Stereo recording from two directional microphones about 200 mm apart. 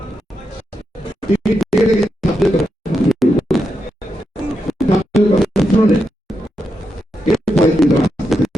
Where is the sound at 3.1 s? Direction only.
Centre (ahead or behind).